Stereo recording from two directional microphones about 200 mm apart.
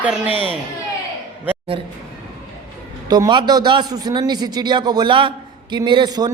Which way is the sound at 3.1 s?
20° right (ahead or behind).